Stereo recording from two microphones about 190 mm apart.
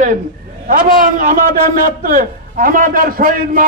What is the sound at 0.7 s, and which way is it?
A man's voice, 45° right (ahead or behind).